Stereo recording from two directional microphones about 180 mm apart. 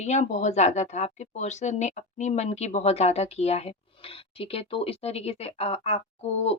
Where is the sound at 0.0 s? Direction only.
40° left (ahead or behind).